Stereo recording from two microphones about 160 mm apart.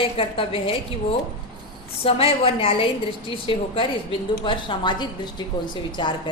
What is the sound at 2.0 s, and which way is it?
A woman's voice, 35° left (ahead or behind).